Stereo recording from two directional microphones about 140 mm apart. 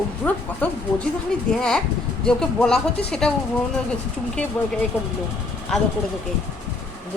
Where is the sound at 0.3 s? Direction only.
10° left (ahead or behind).